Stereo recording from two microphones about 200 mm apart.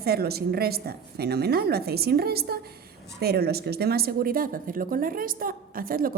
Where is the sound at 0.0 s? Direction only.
50° right (ahead or behind).